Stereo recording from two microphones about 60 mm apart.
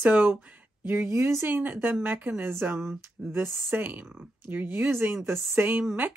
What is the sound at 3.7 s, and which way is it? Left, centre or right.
Speech, right.